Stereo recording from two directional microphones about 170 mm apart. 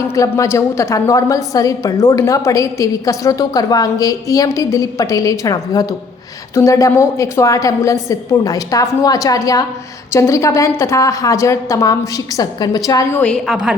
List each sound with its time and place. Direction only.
0.1 s a woman's voice: 15° left (ahead or behind)
13.1 s a woman's voice: 5° left (ahead or behind)